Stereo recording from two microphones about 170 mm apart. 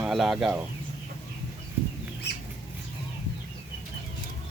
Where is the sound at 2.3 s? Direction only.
75° left (ahead or behind).